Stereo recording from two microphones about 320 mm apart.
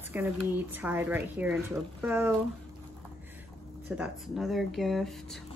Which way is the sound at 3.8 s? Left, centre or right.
Centre.